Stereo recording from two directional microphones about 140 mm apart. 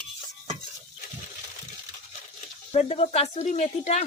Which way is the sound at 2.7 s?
50° left (ahead or behind).